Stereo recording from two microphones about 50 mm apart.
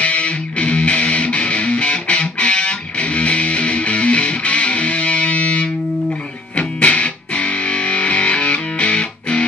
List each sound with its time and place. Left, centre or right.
0.0 s music: left